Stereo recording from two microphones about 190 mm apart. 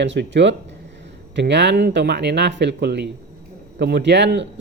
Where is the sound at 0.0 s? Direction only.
70° right (ahead or behind).